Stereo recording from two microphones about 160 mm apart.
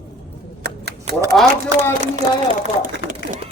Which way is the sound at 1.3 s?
Centre (ahead or behind).